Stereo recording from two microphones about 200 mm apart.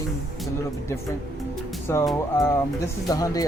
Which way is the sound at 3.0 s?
20° left (ahead or behind).